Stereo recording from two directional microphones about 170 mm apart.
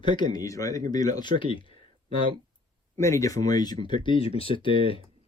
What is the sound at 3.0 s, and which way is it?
Speech, 20° left (ahead or behind).